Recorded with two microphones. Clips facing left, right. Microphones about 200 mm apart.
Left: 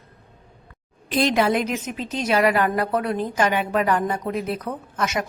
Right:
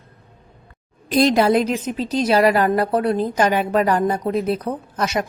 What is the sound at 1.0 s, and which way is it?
A woman's voice, 40° right (ahead or behind).